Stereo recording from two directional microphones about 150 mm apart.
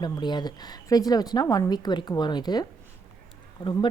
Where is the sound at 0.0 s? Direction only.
30° left (ahead or behind).